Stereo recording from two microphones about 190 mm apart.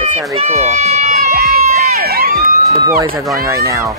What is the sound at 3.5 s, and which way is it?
Speech, 15° right (ahead or behind).